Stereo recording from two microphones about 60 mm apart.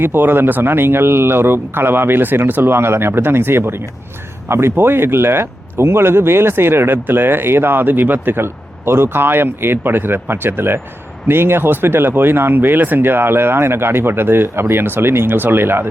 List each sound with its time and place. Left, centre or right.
0.0 s speech: right